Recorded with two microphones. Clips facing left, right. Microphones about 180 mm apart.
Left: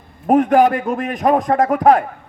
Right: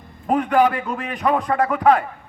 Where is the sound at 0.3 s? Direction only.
45° left (ahead or behind).